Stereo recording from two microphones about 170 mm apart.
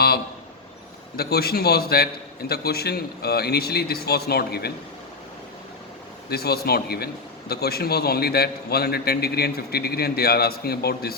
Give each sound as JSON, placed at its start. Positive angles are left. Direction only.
{"t": 1.1, "sound": "a man's voice", "side_deg": 65}
{"t": 6.2, "sound": "a man's voice", "side_deg": 70}